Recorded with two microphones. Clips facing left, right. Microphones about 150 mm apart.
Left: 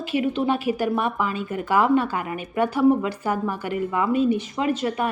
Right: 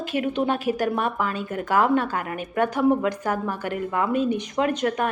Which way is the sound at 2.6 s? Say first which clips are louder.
Left 2 dB; 5° left (ahead or behind).